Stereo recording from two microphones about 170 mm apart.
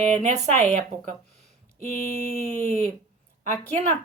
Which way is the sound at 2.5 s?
10° left (ahead or behind).